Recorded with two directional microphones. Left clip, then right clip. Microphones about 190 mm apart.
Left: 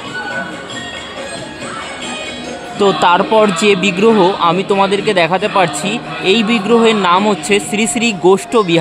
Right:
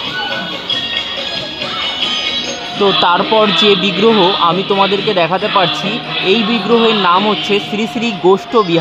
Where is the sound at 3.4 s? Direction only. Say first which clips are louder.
Right 1 dB; 20° left (ahead or behind).